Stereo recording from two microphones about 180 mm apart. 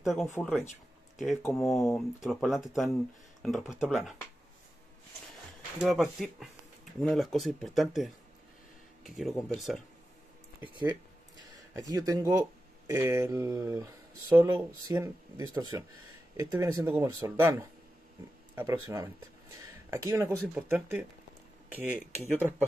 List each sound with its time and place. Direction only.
0.0 s speech: centre (ahead or behind)
5.8 s speech: centre (ahead or behind)
10.6 s speech: 25° right (ahead or behind); by 21.0 s 10° right (ahead or behind)